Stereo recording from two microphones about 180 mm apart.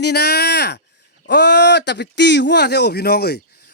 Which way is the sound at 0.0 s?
65° left (ahead or behind).